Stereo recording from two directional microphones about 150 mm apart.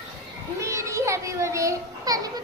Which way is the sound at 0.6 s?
20° right (ahead or behind).